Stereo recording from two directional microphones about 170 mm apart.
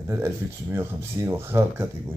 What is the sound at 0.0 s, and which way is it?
Speech, 15° right (ahead or behind).